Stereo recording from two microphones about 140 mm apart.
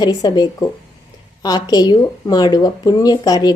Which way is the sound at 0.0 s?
30° left (ahead or behind).